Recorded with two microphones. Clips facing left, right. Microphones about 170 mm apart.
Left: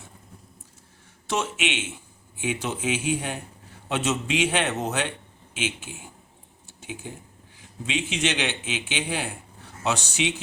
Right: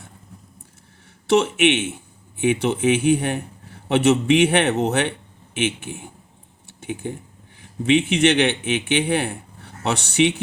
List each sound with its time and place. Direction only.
1.3 s a man's voice: 65° right (ahead or behind)
6.7 s a sound: 60° right (ahead or behind)
7.6 s a man's voice: 60° right (ahead or behind)